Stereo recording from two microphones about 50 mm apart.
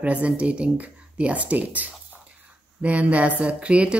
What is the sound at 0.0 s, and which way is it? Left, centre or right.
A woman's voice, right.